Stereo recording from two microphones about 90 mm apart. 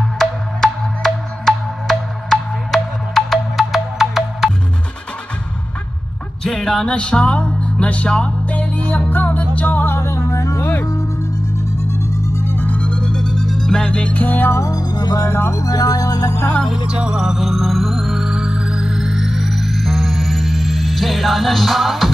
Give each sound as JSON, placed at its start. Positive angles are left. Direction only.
{"t": 0.2, "sound": "music", "side_deg": 5}
{"t": 6.4, "sound": "speech", "side_deg": 5}
{"t": 9.1, "sound": "music", "side_deg": 20}
{"t": 11.9, "sound": "music", "side_deg": 35}
{"t": 14.6, "sound": "music", "side_deg": 45}
{"t": 15.2, "sound": "music", "side_deg": 30}
{"t": 15.6, "sound": "music", "side_deg": 45}
{"t": 16.6, "sound": "music", "side_deg": -10}